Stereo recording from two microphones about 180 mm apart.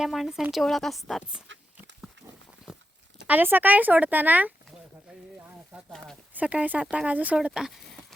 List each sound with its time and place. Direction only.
0.0 s a woman's voice: centre (ahead or behind)
2.2 s pig: 90° right
3.2 s speech: 10° right (ahead or behind)
5.7 s a woman's voice: centre (ahead or behind)